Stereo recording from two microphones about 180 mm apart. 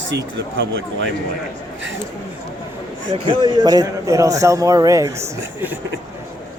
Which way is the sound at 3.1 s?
25° right (ahead or behind).